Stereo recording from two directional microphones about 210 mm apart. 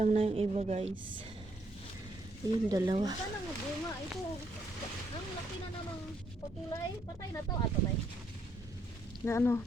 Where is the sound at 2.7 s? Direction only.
20° right (ahead or behind).